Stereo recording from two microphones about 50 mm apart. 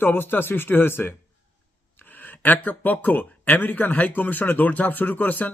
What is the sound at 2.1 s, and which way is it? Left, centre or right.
Speech, left.